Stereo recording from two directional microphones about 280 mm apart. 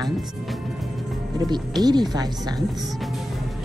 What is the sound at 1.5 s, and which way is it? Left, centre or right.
Speech, centre.